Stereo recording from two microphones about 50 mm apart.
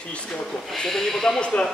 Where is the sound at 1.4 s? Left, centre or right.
Centre.